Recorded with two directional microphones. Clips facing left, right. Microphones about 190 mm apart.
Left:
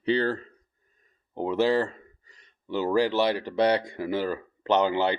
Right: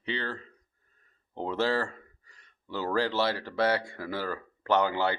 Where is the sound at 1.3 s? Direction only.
15° left (ahead or behind).